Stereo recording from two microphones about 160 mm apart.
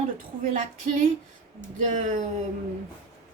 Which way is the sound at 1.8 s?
50° right (ahead or behind).